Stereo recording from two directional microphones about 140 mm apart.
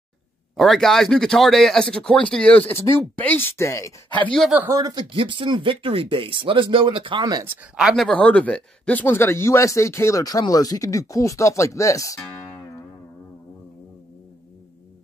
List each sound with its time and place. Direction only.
0.6 s speech: centre (ahead or behind); by 3.9 s 20° left (ahead or behind)
4.1 s speech: 10° left (ahead or behind)
4.6 s speech: 25° right (ahead or behind)
5.1 s speech: 35° right (ahead or behind)
7.7 s speech: centre (ahead or behind); by 12.2 s 25° left (ahead or behind)